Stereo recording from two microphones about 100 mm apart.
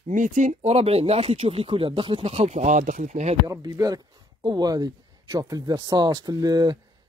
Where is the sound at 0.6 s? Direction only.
85° right.